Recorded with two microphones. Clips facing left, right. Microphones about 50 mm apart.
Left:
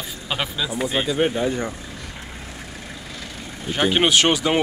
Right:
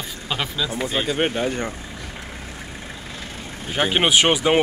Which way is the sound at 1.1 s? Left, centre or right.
Right.